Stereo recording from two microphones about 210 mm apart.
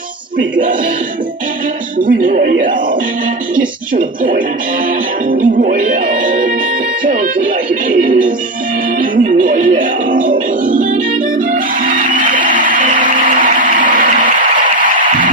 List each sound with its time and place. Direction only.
2.0 s speech: 40° right (ahead or behind)
3.9 s speech: 40° right (ahead or behind)
4.9 s music: 40° right (ahead or behind)